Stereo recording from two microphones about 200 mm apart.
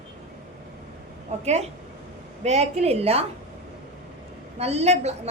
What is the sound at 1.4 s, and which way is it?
A woman's voice, 35° right (ahead or behind).